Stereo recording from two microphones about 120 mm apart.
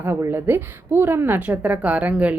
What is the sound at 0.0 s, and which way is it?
A woman's voice, 20° right (ahead or behind).